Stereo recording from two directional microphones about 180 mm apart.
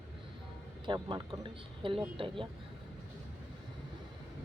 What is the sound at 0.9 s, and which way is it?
A woman's voice, 25° right (ahead or behind).